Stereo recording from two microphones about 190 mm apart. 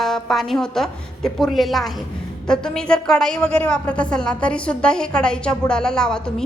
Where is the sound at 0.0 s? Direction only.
Centre (ahead or behind).